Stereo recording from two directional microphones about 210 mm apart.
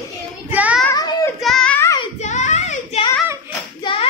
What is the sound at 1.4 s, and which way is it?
Music, 5° left (ahead or behind).